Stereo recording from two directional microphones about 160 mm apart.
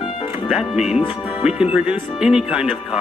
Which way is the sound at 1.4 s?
5° right (ahead or behind).